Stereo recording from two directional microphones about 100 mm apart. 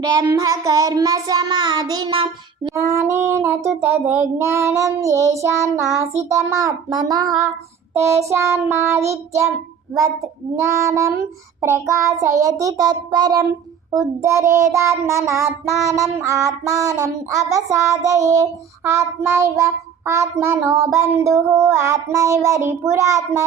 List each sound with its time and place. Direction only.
0.3 s child singing: 35° right (ahead or behind)
2.7 s child singing: 25° right (ahead or behind)
7.9 s child singing: 30° right (ahead or behind)
10.6 s child singing: 30° right (ahead or behind)
14.2 s child singing: 30° right (ahead or behind)